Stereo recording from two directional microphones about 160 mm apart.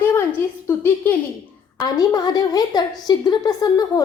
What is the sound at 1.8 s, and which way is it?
A woman's voice, 25° left (ahead or behind).